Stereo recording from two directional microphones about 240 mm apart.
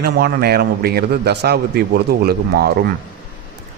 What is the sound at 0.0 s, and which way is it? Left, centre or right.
Speech, right.